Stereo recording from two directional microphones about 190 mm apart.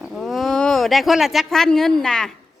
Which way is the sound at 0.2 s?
Centre (ahead or behind).